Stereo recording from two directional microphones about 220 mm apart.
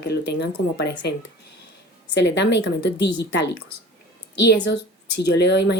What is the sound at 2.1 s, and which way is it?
Speech, 50° left (ahead or behind).